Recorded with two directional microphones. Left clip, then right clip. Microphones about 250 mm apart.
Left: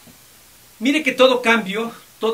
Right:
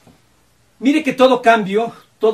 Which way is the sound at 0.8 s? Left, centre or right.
Centre.